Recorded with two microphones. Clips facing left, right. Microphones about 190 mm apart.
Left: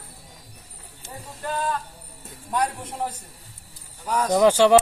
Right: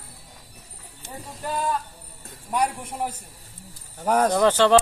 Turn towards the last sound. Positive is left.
turn(degrees=10)  # may be behind; listen again after turning